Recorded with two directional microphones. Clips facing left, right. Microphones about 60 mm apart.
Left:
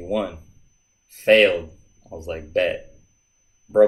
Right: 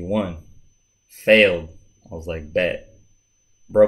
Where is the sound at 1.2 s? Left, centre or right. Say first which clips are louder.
Right 1 dB; right.